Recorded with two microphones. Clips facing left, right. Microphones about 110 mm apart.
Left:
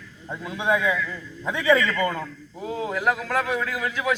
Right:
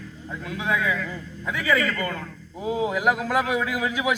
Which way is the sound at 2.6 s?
10° right (ahead or behind).